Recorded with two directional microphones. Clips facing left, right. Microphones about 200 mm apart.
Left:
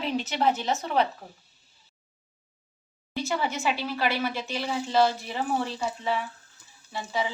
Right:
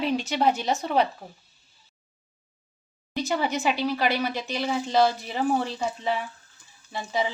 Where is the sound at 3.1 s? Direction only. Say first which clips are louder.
Right 3 dB; 15° right (ahead or behind).